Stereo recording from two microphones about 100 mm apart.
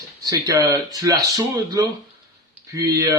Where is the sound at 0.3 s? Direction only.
35° right (ahead or behind).